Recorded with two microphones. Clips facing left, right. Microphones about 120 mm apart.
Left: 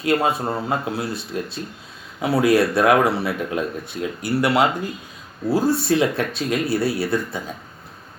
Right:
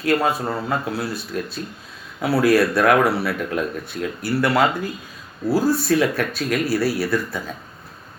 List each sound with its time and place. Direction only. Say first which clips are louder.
0.0 s speech: even; 25° left (ahead or behind)